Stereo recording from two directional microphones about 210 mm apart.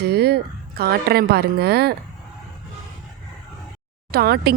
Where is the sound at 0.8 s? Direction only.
45° right (ahead or behind).